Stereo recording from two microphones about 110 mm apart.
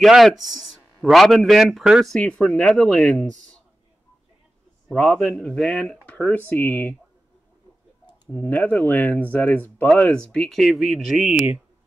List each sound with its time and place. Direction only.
0.0 s speech: centre (ahead or behind)
2.1 s speech: 10° left (ahead or behind)
4.9 s speech: 5° left (ahead or behind)
8.3 s speech: 10° left (ahead or behind); by 11.6 s 10° right (ahead or behind)